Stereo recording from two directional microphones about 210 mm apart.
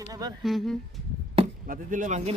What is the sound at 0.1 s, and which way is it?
Speech, 20° right (ahead or behind).